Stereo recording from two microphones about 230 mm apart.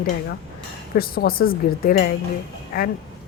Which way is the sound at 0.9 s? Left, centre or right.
Left.